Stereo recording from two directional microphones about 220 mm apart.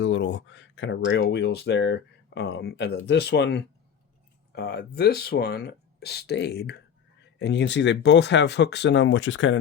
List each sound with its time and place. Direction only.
0.0 s speech: 55° left (ahead or behind)